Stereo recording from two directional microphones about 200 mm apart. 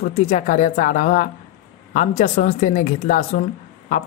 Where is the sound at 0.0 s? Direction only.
35° left (ahead or behind).